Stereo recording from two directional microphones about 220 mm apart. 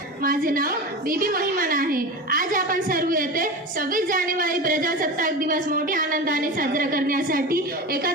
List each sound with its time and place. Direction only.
0.2 s a woman's voice: 40° right (ahead or behind)